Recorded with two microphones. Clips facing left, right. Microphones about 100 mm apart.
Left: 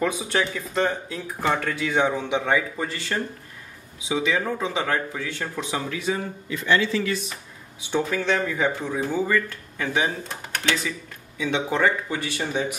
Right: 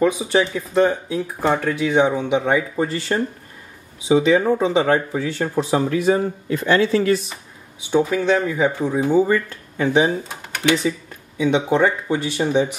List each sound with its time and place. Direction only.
0.0 s speech: 10° right (ahead or behind)
2.7 s speech: 30° right (ahead or behind)
5.9 s a man's voice: 50° right (ahead or behind)
7.9 s speech: 10° right (ahead or behind)
10.2 s speech: 15° right (ahead or behind)
10.8 s speech: 25° right (ahead or behind)